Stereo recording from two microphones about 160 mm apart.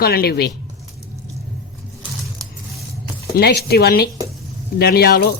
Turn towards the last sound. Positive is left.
turn(degrees=80)